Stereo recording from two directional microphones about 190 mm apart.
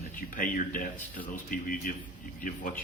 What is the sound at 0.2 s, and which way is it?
Speech, 45° left (ahead or behind).